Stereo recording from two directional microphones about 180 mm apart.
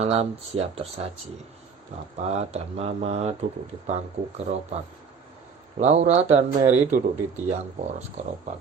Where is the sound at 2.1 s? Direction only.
35° right (ahead or behind).